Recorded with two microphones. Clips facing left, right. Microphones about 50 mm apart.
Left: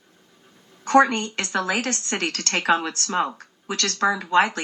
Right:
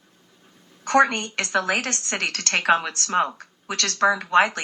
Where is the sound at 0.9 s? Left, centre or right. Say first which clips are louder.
Left 2 dB; right.